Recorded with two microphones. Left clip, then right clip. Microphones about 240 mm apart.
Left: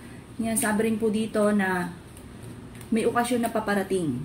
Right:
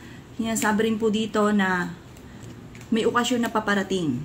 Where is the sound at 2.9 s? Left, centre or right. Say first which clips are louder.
Right 2 dB; right.